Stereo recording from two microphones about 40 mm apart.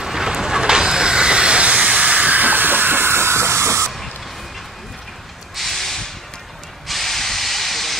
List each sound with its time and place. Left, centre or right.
0.0 s vehicle: centre; by 3.6 s right
5.6 s a sound: centre
6.9 s hiss: centre